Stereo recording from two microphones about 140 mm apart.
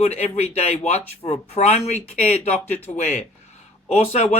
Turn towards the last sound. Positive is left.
turn(degrees=50)  # may be behind; listen again after turning